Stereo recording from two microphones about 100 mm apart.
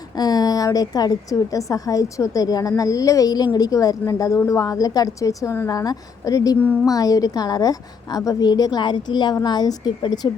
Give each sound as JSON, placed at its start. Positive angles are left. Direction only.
{"t": 0.2, "sound": "a woman's voice", "side_deg": 40}